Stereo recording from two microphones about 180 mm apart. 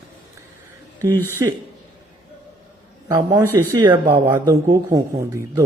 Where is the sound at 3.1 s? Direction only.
15° right (ahead or behind).